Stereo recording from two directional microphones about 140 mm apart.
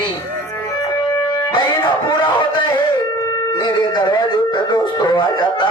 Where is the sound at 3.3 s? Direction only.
30° left (ahead or behind).